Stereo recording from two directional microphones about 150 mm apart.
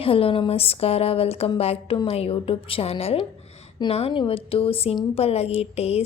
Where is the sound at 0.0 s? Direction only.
40° left (ahead or behind).